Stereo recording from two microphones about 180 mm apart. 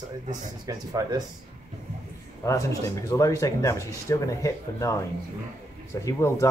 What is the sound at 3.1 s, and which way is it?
Speech, 15° left (ahead or behind).